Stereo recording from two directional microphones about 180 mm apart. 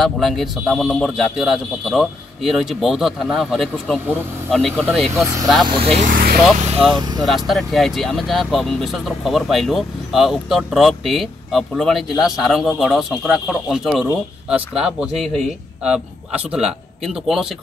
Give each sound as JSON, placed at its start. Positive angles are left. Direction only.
{"t": 0.0, "sound": "speech", "side_deg": 0}
{"t": 5.7, "sound": "speech", "side_deg": -35}
{"t": 7.0, "sound": "speech", "side_deg": -25}
{"t": 7.2, "sound": "speech", "side_deg": 0}